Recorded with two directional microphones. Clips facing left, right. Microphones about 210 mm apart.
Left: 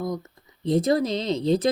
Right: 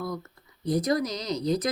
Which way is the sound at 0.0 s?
20° left (ahead or behind).